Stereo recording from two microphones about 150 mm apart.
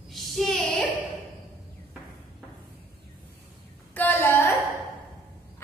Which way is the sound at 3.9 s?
10° left (ahead or behind).